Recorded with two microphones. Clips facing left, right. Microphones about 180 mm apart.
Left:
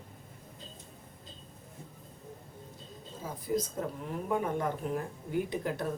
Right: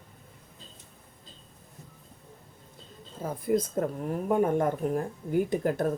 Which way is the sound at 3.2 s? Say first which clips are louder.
Right 6 dB; 55° right (ahead or behind).